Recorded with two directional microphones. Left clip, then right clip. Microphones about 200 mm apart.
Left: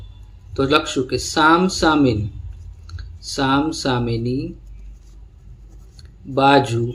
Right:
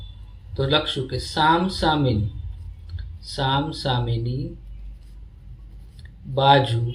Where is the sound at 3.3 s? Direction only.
40° left (ahead or behind).